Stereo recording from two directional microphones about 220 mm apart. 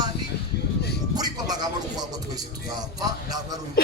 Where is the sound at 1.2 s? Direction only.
20° right (ahead or behind).